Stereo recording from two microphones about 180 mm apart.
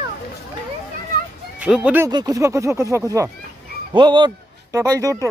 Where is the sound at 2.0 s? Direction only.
20° right (ahead or behind).